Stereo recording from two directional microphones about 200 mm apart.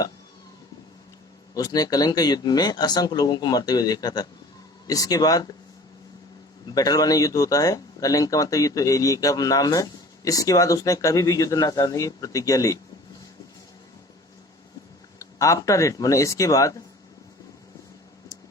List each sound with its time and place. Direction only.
1.5 s speech: 20° left (ahead or behind)
6.7 s speech: 20° left (ahead or behind)
15.2 s speech: 15° left (ahead or behind)